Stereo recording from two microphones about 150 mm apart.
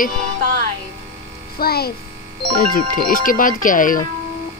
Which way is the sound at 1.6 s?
90° left.